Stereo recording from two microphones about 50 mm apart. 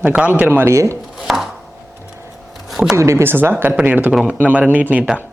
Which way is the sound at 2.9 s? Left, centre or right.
Right.